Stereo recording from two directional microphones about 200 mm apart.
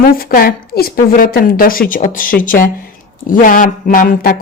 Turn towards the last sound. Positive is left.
turn(degrees=45)  # may be behind; listen again after turning